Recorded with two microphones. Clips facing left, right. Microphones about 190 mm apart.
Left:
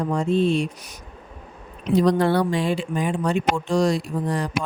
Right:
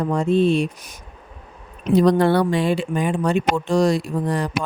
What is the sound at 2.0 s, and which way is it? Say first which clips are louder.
Speech: right 3 dB; 65° right (ahead or behind).